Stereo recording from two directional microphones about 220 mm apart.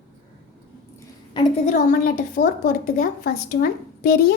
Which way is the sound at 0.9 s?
20° left (ahead or behind).